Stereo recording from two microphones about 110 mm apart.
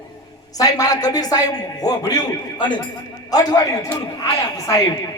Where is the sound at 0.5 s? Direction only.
35° left (ahead or behind).